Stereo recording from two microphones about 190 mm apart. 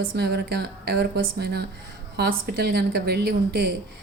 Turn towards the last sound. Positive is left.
turn(degrees=-60)  # may be behind; listen again after turning